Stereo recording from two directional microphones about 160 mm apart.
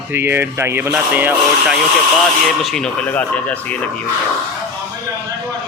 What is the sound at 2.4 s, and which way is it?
Speech, centre (ahead or behind).